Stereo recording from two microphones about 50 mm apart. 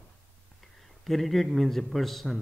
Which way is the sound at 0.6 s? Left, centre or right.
Centre.